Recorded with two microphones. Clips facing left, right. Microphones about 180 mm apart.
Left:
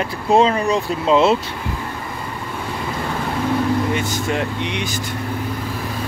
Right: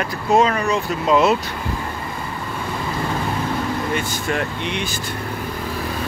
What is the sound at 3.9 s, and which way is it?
Speech, 20° left (ahead or behind).